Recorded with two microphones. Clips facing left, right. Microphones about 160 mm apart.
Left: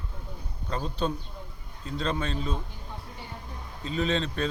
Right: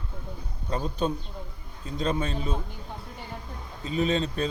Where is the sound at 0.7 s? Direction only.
15° right (ahead or behind).